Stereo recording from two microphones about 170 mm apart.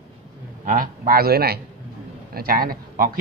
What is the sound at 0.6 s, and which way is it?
Speech, 55° right (ahead or behind).